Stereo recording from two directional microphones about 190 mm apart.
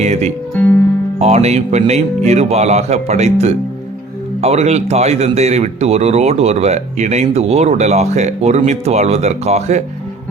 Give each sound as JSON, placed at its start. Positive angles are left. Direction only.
{"t": 0.0, "sound": "speech", "side_deg": -35}